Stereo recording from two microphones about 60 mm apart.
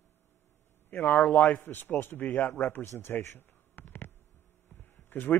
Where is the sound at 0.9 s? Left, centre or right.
Left.